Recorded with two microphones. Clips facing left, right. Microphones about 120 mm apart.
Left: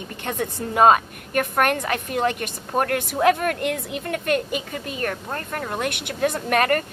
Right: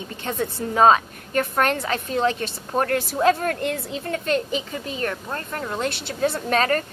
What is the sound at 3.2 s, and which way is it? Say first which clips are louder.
A woman's voice: left 1 dB; 65° left (ahead or behind).